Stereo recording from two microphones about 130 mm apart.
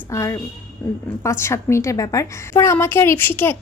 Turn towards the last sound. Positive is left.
turn(degrees=15)  # may be behind; listen again after turning